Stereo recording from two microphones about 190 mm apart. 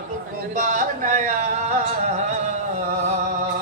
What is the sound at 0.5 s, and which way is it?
Speech, 45° right (ahead or behind).